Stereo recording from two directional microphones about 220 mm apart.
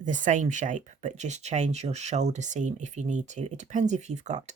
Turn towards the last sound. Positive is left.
turn(degrees=-30)  # may be behind; listen again after turning